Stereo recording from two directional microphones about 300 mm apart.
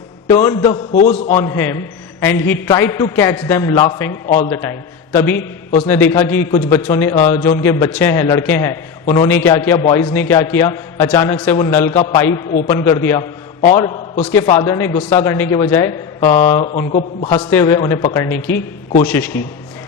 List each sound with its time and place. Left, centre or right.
0.3 s a man's voice: centre
1.4 s a man's voice: centre
17.5 s a man's voice: centre